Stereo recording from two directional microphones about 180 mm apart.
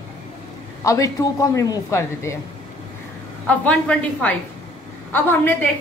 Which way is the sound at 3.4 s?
10° left (ahead or behind).